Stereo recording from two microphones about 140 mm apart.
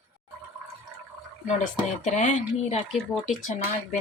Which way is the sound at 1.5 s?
60° left (ahead or behind).